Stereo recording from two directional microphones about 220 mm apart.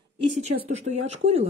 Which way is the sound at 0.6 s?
30° right (ahead or behind).